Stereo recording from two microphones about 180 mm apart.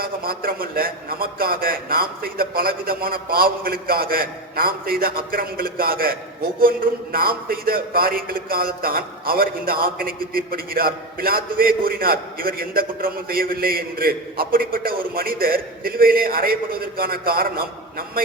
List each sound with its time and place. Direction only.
0.0 s a man's voice: 55° right (ahead or behind)